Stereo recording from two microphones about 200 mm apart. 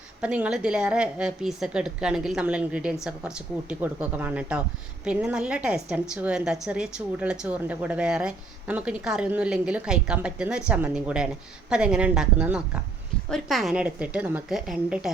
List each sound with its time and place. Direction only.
0.2 s a woman's voice: 5° right (ahead or behind)